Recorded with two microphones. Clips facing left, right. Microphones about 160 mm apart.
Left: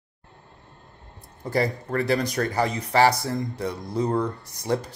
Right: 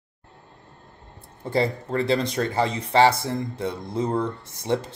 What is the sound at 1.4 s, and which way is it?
Speech, 25° right (ahead or behind).